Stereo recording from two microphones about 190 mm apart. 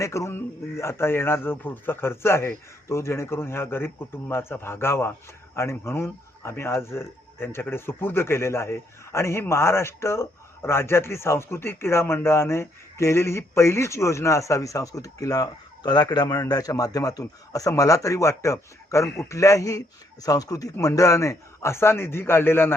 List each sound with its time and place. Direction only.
0.0 s a man's voice: 15° left (ahead or behind)